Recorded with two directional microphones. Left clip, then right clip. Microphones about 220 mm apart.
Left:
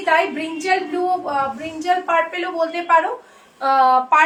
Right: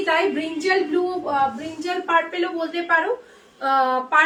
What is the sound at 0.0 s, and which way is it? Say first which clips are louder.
Speech: left 3 dB; 15° right (ahead or behind).